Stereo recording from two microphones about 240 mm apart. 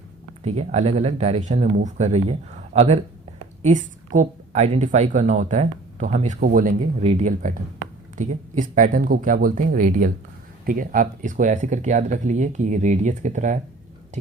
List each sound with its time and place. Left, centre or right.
0.4 s a woman's voice: right